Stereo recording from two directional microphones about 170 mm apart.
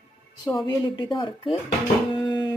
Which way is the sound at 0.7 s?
25° left (ahead or behind).